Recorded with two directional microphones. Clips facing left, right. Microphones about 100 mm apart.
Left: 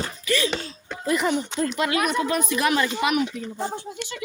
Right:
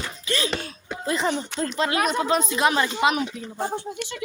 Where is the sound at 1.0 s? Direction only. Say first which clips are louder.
Left 2 dB; 25° right (ahead or behind).